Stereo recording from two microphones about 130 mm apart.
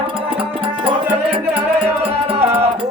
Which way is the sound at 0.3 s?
40° right (ahead or behind).